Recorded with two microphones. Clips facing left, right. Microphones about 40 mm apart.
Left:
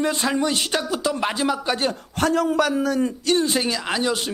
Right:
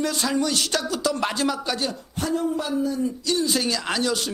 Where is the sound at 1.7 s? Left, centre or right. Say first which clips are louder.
Left 4 dB; left.